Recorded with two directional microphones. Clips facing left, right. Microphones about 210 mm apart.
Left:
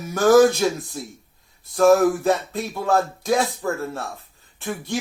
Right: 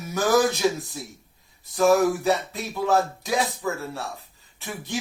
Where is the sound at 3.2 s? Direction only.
50° left (ahead or behind).